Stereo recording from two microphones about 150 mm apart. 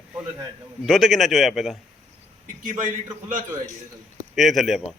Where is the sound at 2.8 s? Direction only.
60° right (ahead or behind).